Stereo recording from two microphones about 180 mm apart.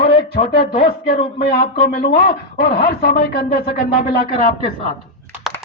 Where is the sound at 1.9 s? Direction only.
50° left (ahead or behind).